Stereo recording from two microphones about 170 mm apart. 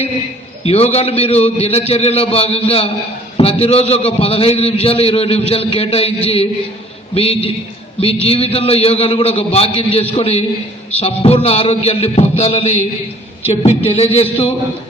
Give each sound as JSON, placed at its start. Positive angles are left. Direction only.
{"t": 0.6, "sound": "a man's voice", "side_deg": 35}